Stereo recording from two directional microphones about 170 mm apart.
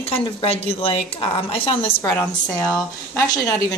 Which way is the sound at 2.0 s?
10° left (ahead or behind).